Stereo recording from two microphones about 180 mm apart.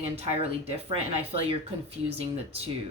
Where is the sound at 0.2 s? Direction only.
35° right (ahead or behind).